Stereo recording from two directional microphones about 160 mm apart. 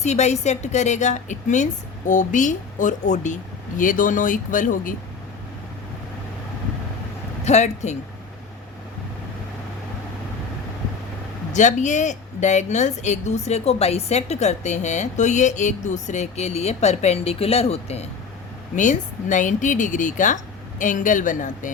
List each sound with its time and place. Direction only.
0.0 s a woman's voice: 45° left (ahead or behind)
7.4 s a woman's voice: 45° left (ahead or behind)
11.5 s a woman's voice: 50° left (ahead or behind)
18.8 s a woman's voice: 50° left (ahead or behind)